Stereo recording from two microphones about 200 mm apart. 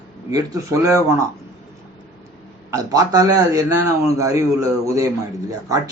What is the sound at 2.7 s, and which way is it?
A man's voice, 15° right (ahead or behind).